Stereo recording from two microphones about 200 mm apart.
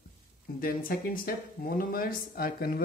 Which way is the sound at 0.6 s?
45° left (ahead or behind).